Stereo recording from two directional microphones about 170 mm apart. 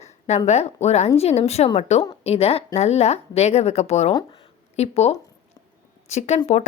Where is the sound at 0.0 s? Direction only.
40° left (ahead or behind).